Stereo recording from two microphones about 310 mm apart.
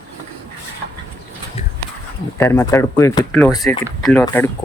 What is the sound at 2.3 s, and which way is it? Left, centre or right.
Speech, centre.